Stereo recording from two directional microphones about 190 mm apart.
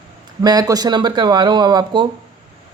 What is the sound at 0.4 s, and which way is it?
Speech, 20° right (ahead or behind).